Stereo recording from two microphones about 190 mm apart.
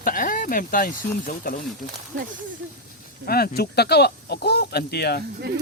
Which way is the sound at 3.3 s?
55° left (ahead or behind).